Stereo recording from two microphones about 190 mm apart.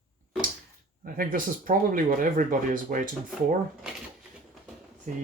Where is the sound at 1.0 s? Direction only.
50° right (ahead or behind).